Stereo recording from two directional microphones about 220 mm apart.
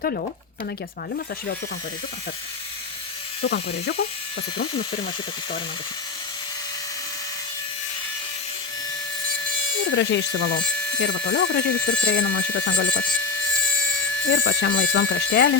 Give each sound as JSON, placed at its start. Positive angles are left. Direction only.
{"t": 0.0, "sound": "speech", "side_deg": 45}
{"t": 3.4, "sound": "speech", "side_deg": 50}
{"t": 9.8, "sound": "speech", "side_deg": 55}
{"t": 14.3, "sound": "speech", "side_deg": 60}